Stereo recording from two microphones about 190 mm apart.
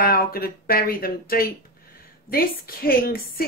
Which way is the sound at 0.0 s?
50° left (ahead or behind).